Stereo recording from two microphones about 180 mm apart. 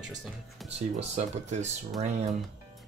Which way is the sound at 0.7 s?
35° right (ahead or behind).